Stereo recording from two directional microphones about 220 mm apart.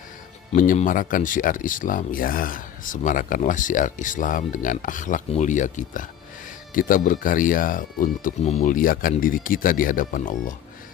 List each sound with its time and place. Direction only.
0.5 s speech: 35° left (ahead or behind)